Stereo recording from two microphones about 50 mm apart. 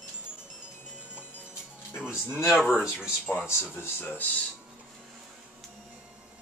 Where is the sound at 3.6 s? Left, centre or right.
Left.